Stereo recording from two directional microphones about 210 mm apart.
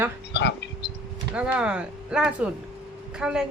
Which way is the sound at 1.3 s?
5° right (ahead or behind).